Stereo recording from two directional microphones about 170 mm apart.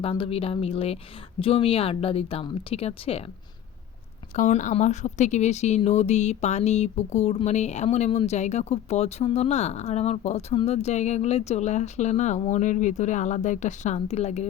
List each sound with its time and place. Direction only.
0.0 s a woman's voice: 35° left (ahead or behind)
4.4 s a woman's voice: 45° left (ahead or behind)